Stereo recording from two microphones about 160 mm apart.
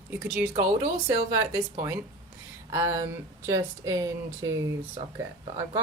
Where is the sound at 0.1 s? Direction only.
10° right (ahead or behind).